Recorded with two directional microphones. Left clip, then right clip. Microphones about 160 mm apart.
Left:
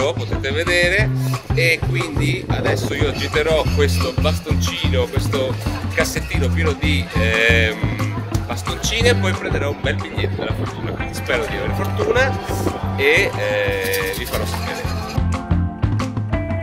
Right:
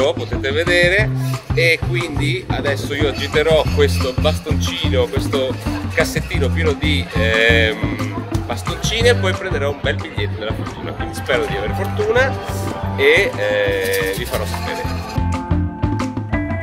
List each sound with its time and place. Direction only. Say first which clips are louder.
0.0 s speech: right 3 dB; 30° right (ahead or behind)
8.8 s speech: right 2 dB; 30° right (ahead or behind)
11.2 s speech: right 3 dB; 30° right (ahead or behind)
13.0 s speech: right 2 dB; 30° right (ahead or behind)